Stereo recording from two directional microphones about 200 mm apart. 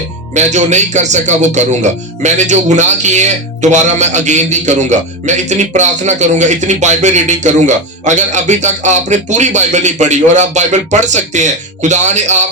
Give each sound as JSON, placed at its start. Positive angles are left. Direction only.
{"t": 0.3, "sound": "a man's voice", "side_deg": -35}